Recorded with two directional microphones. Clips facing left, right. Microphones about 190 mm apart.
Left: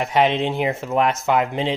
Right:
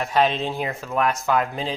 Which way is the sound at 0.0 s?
20° left (ahead or behind).